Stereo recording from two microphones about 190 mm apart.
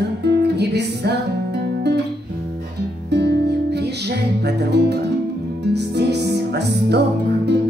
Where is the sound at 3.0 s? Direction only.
60° right (ahead or behind).